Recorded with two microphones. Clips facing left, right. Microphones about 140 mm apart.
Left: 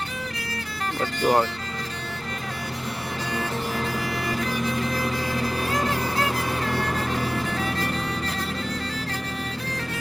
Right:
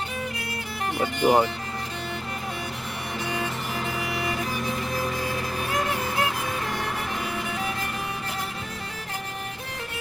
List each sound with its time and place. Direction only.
0.9 s speech: 15° right (ahead or behind)